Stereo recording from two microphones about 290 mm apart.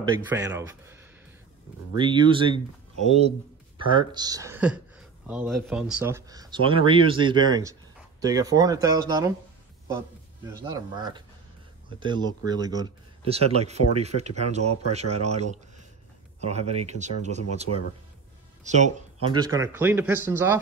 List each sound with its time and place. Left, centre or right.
0.1 s speech: centre
2.0 s speech: centre
10.4 s speech: centre
19.2 s speech: centre